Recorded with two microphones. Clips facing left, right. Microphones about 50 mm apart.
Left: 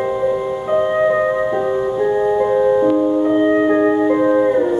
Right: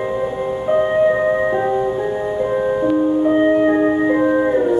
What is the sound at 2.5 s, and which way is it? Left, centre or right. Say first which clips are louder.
Music: left 1 dB; centre.